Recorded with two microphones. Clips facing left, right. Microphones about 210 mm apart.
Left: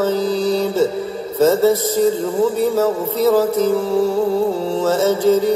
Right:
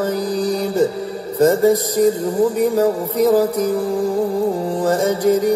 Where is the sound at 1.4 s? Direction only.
15° right (ahead or behind).